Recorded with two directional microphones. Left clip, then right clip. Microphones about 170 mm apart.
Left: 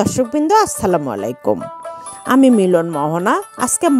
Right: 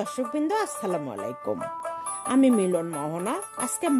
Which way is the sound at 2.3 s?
40° left (ahead or behind).